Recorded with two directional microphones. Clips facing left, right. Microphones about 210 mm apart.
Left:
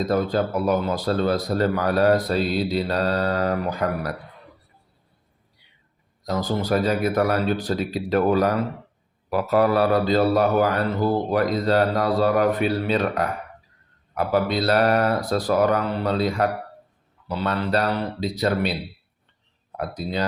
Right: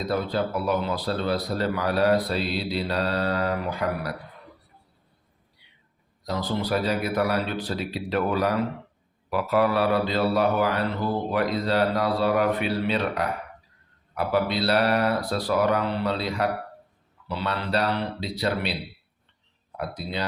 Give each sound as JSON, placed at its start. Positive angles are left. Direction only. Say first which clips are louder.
{"t": 0.0, "sound": "speech", "louder": "left 4 dB", "side_deg": 45}
{"t": 6.2, "sound": "speech", "louder": "left 3 dB", "side_deg": 45}
{"t": 14.3, "sound": "speech", "louder": "left 3 dB", "side_deg": 45}
{"t": 19.7, "sound": "speech", "louder": "left 4 dB", "side_deg": 45}